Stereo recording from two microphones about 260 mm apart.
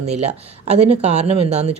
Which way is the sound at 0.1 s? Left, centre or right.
Right.